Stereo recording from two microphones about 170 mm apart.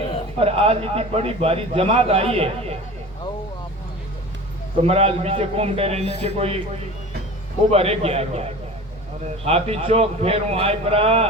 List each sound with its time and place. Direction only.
0.3 s a man's voice: 35° right (ahead or behind)
4.8 s a man's voice: 35° right (ahead or behind)
7.7 s a man's voice: 35° right (ahead or behind)